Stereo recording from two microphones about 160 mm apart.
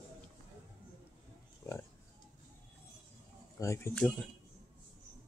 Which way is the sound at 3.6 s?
15° left (ahead or behind).